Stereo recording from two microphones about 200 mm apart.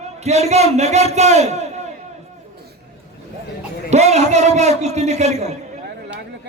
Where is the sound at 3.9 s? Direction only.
35° right (ahead or behind).